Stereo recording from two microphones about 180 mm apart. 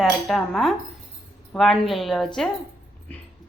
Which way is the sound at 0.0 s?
Centre (ahead or behind).